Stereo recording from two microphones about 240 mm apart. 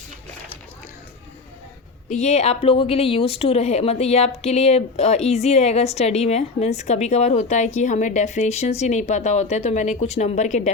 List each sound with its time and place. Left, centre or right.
2.0 s a woman's voice: left